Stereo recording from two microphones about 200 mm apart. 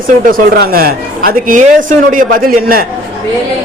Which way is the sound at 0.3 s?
45° right (ahead or behind).